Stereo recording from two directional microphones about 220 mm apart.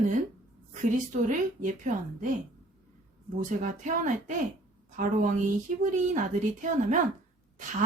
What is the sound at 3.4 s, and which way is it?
A woman's voice, 35° right (ahead or behind).